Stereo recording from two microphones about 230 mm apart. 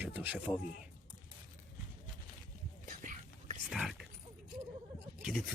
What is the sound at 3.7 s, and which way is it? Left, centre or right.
Pig, centre.